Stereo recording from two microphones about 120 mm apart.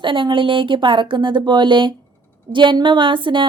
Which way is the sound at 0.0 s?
45° right (ahead or behind).